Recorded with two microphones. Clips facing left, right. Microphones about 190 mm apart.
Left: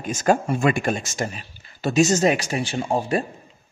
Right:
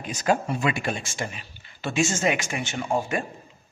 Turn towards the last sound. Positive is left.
turn(degrees=35)  # may be behind; listen again after turning